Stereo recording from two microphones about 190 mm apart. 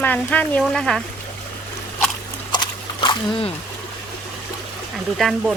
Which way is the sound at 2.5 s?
25° left (ahead or behind).